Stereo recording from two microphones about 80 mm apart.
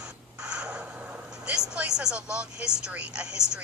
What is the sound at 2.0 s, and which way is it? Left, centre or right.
A woman's voice, centre.